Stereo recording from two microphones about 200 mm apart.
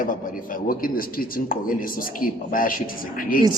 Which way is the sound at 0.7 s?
45° left (ahead or behind).